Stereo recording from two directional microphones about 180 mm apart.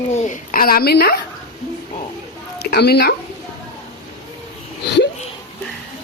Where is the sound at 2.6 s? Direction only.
60° left (ahead or behind).